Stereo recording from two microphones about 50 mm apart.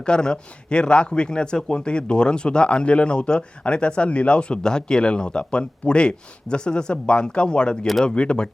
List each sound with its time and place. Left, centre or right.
0.0 s speech: centre